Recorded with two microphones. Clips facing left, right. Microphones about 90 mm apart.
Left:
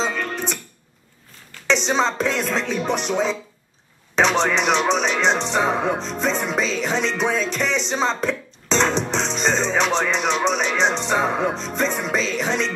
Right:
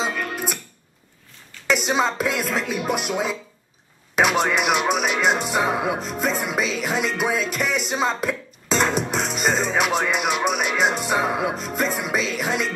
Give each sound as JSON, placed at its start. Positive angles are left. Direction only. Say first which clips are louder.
{"t": 0.0, "sound": "music", "louder": "left 1 dB", "side_deg": -5}
{"t": 1.7, "sound": "speech", "louder": "left 1 dB", "side_deg": -5}